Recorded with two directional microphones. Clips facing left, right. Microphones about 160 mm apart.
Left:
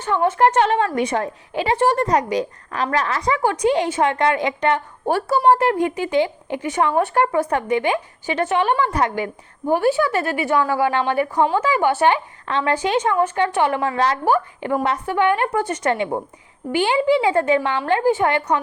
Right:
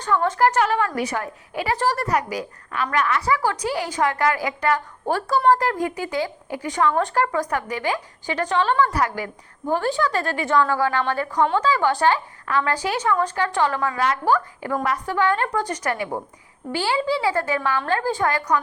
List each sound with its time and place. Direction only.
0.0 s a woman's voice: 20° left (ahead or behind)